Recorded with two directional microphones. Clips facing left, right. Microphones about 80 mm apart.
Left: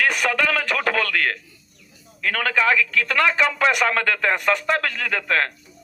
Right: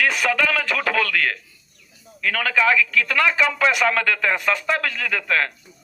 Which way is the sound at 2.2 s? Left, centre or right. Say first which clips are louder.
Right 1 dB; left.